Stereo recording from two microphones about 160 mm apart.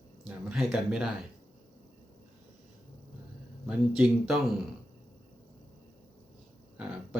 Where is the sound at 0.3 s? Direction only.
5° right (ahead or behind).